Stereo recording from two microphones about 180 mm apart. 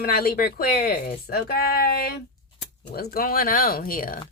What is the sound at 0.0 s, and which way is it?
Speech, 60° left (ahead or behind).